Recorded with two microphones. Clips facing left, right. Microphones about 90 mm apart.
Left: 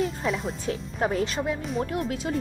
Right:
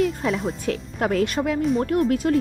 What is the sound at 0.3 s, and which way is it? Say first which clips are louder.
Speech: right 4 dB; centre (ahead or behind).